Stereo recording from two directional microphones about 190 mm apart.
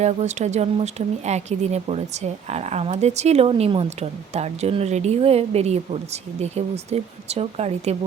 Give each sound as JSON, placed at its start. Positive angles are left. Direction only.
{"t": 0.0, "sound": "speech", "side_deg": -35}